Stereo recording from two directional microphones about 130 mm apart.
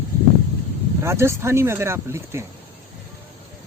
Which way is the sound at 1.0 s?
20° right (ahead or behind).